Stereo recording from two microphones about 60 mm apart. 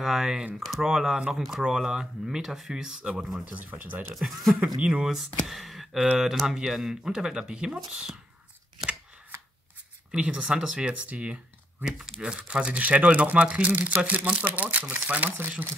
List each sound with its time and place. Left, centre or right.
0.0 s speech: centre
3.4 s speech: right
4.1 s speech: centre
10.1 s speech: centre
11.8 s speech: centre; by 15.3 s right